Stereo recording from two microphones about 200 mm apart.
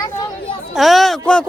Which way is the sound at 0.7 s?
Centre (ahead or behind).